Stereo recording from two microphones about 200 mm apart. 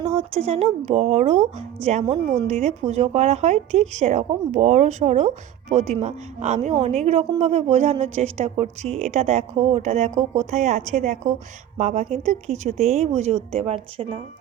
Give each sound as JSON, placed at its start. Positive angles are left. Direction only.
{"t": 0.0, "sound": "speech", "side_deg": -30}